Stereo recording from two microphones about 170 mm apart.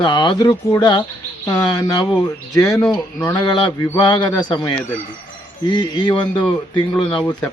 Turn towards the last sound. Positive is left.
turn(degrees=25)  # may be behind; listen again after turning